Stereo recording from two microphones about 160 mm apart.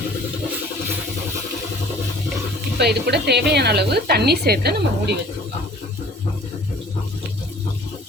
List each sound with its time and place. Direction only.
2.7 s a woman's voice: 90° right